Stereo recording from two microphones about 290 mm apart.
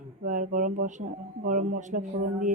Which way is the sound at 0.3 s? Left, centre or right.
Right.